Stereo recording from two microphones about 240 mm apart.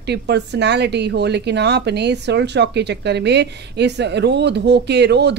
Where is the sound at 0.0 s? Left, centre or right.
Right.